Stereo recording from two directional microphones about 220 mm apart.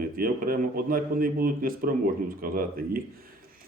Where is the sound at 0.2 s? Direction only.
40° right (ahead or behind).